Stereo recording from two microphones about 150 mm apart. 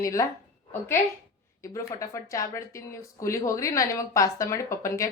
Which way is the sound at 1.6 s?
20° left (ahead or behind).